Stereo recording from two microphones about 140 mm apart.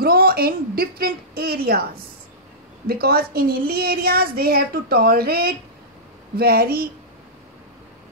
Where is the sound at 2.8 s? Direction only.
90° right.